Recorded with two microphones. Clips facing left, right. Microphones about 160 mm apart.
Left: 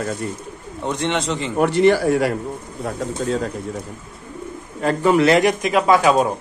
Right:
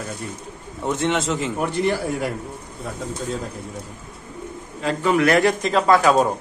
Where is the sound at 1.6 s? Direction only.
80° left.